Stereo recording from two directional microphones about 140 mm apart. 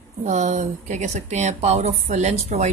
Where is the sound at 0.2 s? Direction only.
60° right (ahead or behind).